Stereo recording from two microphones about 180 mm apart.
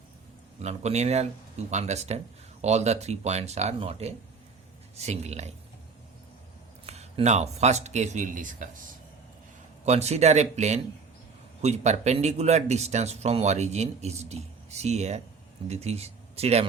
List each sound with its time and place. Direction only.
0.6 s speech: 40° right (ahead or behind)
6.8 s speech: 35° right (ahead or behind)
9.8 s speech: 35° right (ahead or behind)